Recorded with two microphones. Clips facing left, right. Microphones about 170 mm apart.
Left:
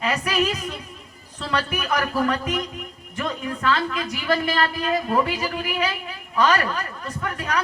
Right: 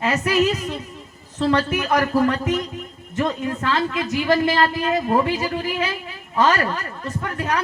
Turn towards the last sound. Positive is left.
turn(degrees=-25)  # may be behind; listen again after turning